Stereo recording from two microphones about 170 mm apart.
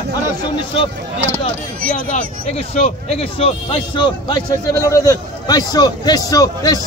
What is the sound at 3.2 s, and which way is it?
Speech, 35° left (ahead or behind).